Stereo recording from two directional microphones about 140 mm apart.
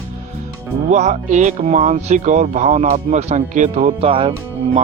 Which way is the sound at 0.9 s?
55° right (ahead or behind).